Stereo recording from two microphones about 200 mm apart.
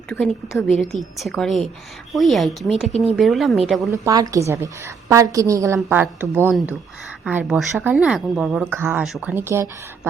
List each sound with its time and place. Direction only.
0.1 s speech: centre (ahead or behind)
2.9 s speech: 30° right (ahead or behind)
3.2 s speech: centre (ahead or behind)
3.9 s speech: 15° right (ahead or behind)